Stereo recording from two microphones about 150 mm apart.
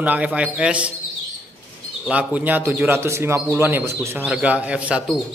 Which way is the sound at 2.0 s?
10° right (ahead or behind).